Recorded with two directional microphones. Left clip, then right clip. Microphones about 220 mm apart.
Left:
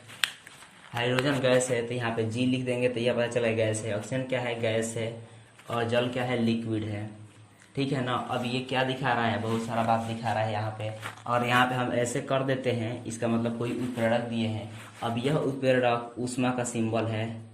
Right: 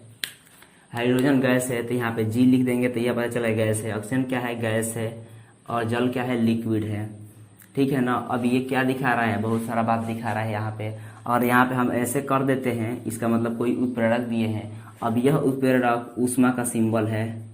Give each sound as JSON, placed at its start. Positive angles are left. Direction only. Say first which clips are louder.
{"t": 0.9, "sound": "speech", "louder": "right 5 dB", "side_deg": -25}